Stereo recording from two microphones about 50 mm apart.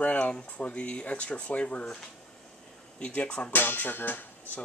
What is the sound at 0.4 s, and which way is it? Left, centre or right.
Speech, left.